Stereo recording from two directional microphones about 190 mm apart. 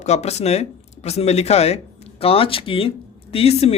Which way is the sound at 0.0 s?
35° left (ahead or behind).